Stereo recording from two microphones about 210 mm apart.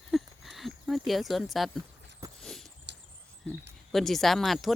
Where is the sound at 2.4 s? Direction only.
Centre (ahead or behind).